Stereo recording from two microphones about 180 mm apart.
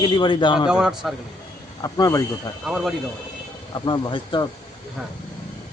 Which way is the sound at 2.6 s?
Centre (ahead or behind).